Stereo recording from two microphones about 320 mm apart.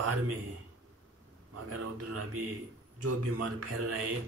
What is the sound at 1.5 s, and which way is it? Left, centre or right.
Speech, right.